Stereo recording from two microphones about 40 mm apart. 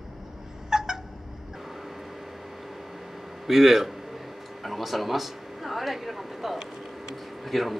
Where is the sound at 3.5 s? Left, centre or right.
Centre.